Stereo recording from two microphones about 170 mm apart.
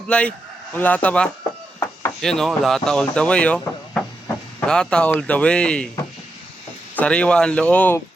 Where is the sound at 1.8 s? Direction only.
15° left (ahead or behind).